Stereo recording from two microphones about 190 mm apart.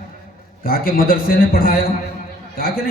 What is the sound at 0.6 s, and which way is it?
A man's voice, 50° left (ahead or behind).